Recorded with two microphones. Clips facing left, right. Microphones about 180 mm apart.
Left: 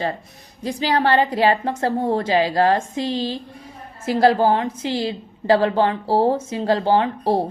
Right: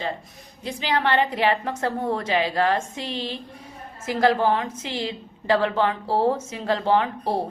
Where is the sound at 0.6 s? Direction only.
40° left (ahead or behind).